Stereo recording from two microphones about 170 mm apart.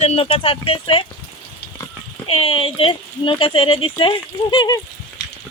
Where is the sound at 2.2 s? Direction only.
35° left (ahead or behind).